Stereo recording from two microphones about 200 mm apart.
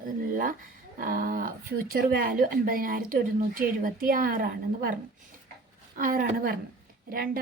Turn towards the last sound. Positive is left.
turn(degrees=-45)  # may be behind; listen again after turning